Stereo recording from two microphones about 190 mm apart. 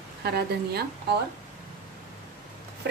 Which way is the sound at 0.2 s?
55° right (ahead or behind).